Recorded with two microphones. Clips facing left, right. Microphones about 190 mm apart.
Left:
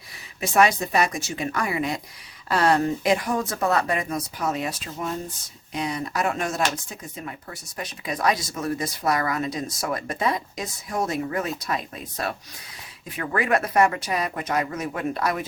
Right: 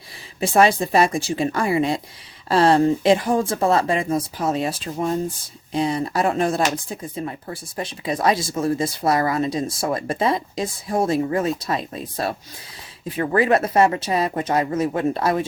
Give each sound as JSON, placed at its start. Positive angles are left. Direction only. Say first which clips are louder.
{"t": 0.3, "sound": "speech", "louder": "right 4 dB", "side_deg": -30}